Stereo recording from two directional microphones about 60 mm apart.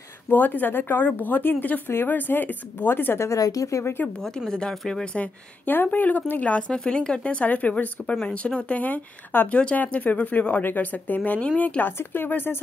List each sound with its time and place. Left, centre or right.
0.3 s a woman's voice: left
3.3 s speech: left
4.5 s speech: centre
5.1 s speech: left
6.7 s a woman's voice: centre; by 12.6 s left